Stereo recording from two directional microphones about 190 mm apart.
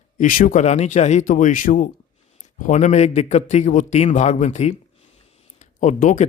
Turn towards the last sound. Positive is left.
turn(degrees=40)  # may be behind; listen again after turning